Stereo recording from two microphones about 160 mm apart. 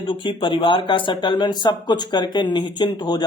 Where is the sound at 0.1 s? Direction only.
30° left (ahead or behind).